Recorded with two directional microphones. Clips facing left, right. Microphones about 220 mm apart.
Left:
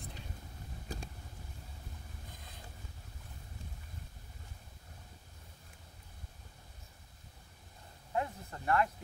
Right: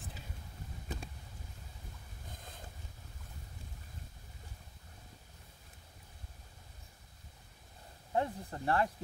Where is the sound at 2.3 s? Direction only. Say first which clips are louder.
Right 2 dB; 45° right (ahead or behind).